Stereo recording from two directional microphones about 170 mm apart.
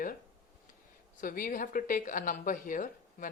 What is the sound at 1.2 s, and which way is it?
Speech, 55° left (ahead or behind).